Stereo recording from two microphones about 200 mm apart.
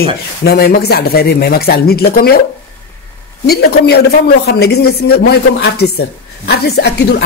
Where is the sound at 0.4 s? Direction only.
50° left (ahead or behind).